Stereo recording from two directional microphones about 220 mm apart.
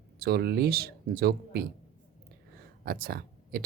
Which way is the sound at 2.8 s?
45° right (ahead or behind).